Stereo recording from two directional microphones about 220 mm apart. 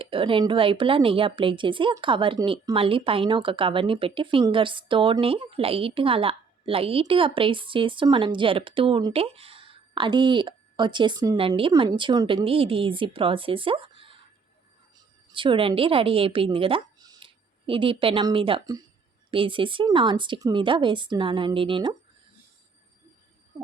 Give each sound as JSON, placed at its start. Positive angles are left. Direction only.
{"t": 0.0, "sound": "a woman's voice", "side_deg": -25}
{"t": 15.3, "sound": "a woman's voice", "side_deg": -20}